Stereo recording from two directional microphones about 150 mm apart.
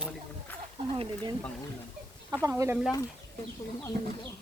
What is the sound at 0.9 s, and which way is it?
Speech, 35° right (ahead or behind).